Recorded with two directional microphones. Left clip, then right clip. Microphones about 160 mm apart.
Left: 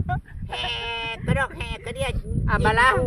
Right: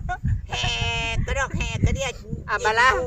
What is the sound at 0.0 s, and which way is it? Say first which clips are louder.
Sheep: even; 15° right (ahead or behind).